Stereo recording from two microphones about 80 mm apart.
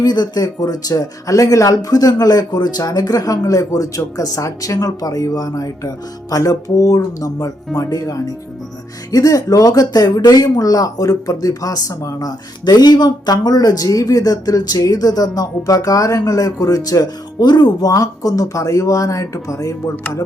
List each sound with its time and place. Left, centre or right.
0.0 s speech: left